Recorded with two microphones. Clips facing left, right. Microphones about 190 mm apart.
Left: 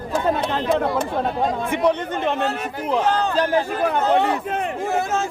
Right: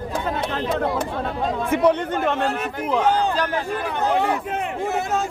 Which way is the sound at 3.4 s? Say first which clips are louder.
Left 5 dB; 30° left (ahead or behind).